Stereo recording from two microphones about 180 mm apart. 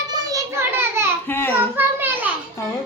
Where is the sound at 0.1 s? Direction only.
20° right (ahead or behind).